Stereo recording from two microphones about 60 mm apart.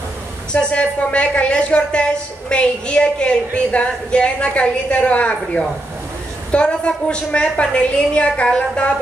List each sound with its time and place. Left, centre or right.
0.5 s a woman's voice: centre